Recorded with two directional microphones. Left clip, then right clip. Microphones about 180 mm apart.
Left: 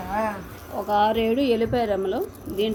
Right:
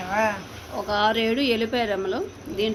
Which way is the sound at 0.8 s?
20° left (ahead or behind).